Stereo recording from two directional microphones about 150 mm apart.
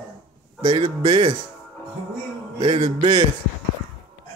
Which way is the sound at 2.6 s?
35° right (ahead or behind).